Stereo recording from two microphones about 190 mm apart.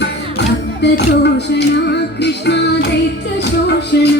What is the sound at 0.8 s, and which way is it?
Music, 65° left (ahead or behind).